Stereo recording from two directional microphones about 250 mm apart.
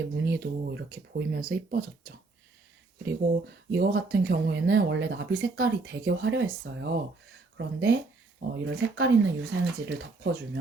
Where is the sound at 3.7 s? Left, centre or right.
Right.